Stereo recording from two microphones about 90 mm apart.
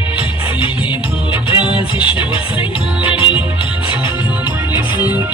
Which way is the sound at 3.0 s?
70° left (ahead or behind).